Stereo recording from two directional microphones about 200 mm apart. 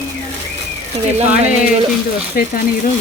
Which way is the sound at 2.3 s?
45° left (ahead or behind).